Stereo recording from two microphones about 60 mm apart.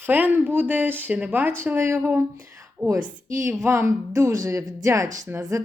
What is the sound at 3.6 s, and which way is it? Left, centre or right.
Speech, right.